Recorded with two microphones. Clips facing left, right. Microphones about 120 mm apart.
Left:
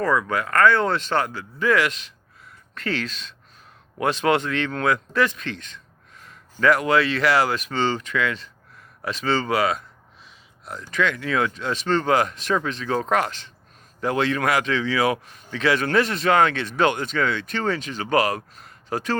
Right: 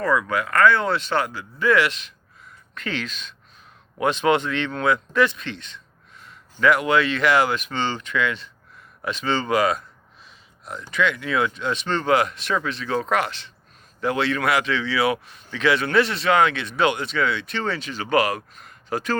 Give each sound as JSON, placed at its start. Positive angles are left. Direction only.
{"t": 0.0, "sound": "speech", "side_deg": 40}
{"t": 4.9, "sound": "a sound", "side_deg": 40}
{"t": 6.8, "sound": "speech", "side_deg": 35}
{"t": 10.9, "sound": "speech", "side_deg": 40}